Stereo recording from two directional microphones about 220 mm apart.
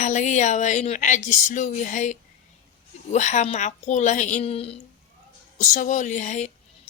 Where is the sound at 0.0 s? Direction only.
35° left (ahead or behind).